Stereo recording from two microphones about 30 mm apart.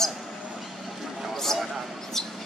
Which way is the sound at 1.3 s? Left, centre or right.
Centre.